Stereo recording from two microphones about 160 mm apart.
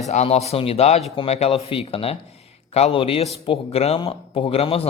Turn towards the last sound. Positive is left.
turn(degrees=35)  # may be behind; listen again after turning